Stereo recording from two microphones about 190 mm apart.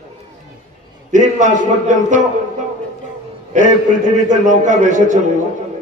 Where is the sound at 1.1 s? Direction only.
40° right (ahead or behind).